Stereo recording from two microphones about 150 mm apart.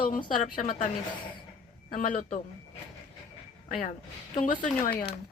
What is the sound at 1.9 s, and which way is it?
Speech, 65° left (ahead or behind).